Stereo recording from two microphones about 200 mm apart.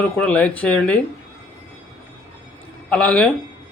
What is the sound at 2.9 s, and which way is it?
Speech, 5° left (ahead or behind).